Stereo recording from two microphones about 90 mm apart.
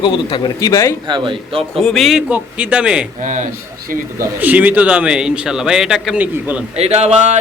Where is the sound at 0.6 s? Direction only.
35° left (ahead or behind).